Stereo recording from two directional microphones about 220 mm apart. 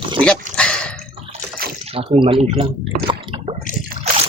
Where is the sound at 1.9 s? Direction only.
25° right (ahead or behind).